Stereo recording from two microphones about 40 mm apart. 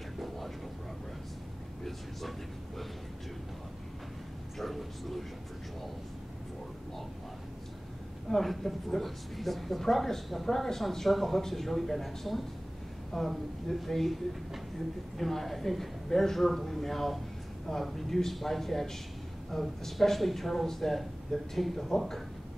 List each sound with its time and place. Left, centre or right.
4.6 s a sound: centre
8.3 s speech: centre
15.1 s speech: centre